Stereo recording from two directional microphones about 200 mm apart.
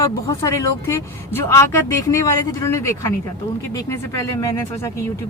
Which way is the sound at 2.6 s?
15° left (ahead or behind).